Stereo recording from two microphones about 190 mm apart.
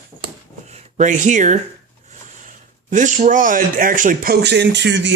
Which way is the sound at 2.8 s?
40° right (ahead or behind).